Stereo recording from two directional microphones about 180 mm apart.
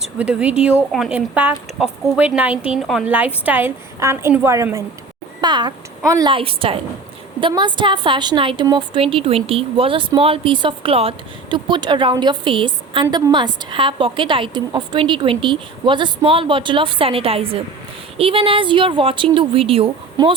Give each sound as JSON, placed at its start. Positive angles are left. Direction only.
{"t": 0.0, "sound": "speech", "side_deg": -5}
{"t": 6.3, "sound": "a woman's voice", "side_deg": -30}